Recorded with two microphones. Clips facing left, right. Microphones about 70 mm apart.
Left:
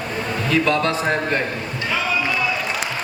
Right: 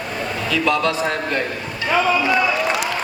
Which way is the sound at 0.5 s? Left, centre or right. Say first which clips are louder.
Even; left.